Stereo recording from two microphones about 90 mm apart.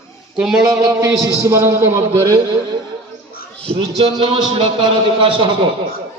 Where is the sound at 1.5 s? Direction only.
30° right (ahead or behind).